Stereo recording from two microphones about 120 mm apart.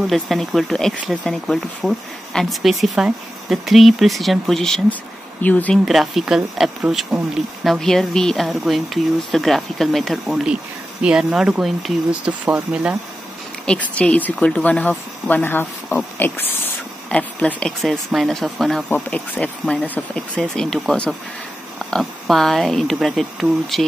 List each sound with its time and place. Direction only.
0.0 s speech: centre (ahead or behind)
5.9 s speech: centre (ahead or behind)
13.7 s speech: 10° left (ahead or behind)